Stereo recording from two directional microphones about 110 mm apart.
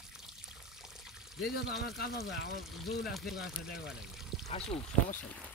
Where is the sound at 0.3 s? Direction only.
5° right (ahead or behind).